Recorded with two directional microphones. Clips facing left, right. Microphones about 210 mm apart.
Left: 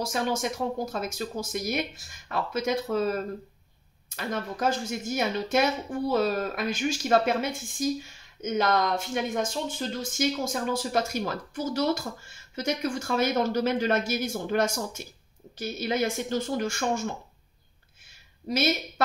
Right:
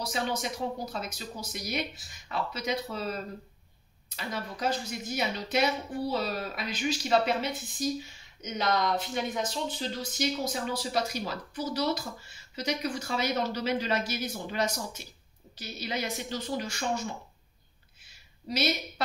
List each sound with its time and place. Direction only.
0.0 s speech: 50° left (ahead or behind)